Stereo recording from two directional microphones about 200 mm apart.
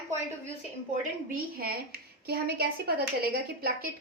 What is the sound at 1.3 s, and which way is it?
A woman's voice, 45° right (ahead or behind).